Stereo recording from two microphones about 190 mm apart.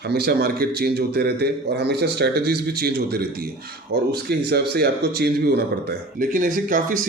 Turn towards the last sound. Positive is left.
turn(degrees=-45)  # may be behind; listen again after turning